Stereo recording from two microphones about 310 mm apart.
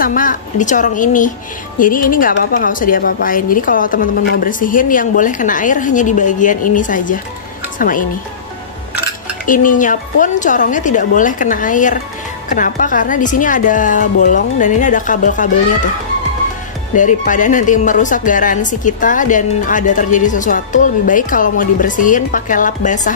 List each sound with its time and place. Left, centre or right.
0.0 s a woman's voice: left
9.5 s a woman's voice: left
16.9 s a woman's voice: left